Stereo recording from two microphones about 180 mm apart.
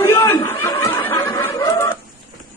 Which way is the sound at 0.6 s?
10° left (ahead or behind).